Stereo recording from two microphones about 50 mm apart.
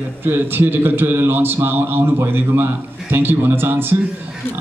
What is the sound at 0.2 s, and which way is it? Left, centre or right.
A man's voice, right.